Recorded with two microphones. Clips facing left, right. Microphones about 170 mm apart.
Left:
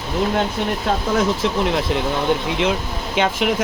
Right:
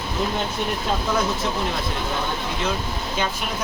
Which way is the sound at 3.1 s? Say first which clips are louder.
Left 9 dB; 75° left (ahead or behind).